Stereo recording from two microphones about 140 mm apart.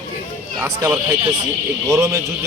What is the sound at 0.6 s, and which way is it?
A man's voice, 20° right (ahead or behind).